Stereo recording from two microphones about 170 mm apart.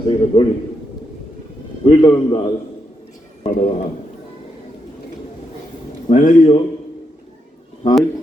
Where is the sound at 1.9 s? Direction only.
25° left (ahead or behind).